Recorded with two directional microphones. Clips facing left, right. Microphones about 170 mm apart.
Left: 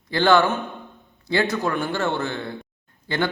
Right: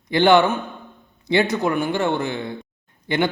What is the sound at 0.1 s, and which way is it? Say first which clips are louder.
A man's voice: right 3 dB; 20° right (ahead or behind).